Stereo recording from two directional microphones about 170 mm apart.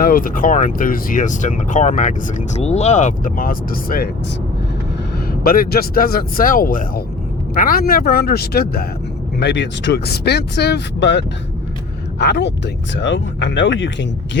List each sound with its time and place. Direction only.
0.0 s speech: 55° left (ahead or behind)
5.3 s speech: 60° left (ahead or behind)
9.4 s speech: 90° left
12.2 s speech: 85° left